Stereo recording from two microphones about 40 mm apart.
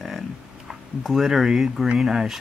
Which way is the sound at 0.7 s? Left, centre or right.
Centre.